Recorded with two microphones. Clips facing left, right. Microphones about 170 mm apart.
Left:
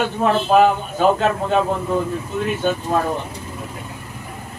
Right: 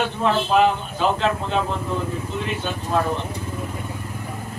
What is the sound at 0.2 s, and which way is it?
A man's voice, 50° left (ahead or behind).